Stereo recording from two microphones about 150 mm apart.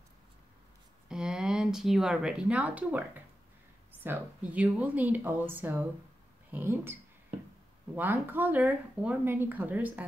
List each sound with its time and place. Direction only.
1.0 s speech: 5° right (ahead or behind)